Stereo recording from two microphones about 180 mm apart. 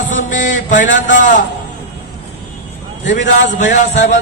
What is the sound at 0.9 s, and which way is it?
Speech, 90° left.